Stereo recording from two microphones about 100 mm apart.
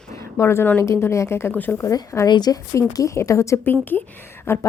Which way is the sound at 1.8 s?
35° left (ahead or behind).